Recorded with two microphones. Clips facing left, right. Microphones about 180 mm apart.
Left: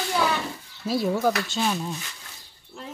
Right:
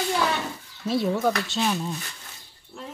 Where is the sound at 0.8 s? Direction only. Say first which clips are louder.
Even; 5° left (ahead or behind).